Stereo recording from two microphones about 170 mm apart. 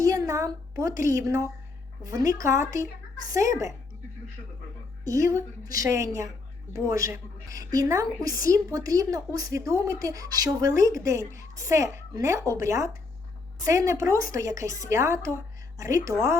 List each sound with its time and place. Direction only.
0.0 s a woman's voice: 20° right (ahead or behind)
5.0 s a woman's voice: 20° right (ahead or behind)